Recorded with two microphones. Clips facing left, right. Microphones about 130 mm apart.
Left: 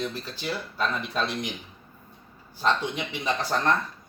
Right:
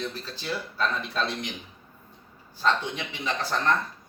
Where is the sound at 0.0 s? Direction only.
15° left (ahead or behind).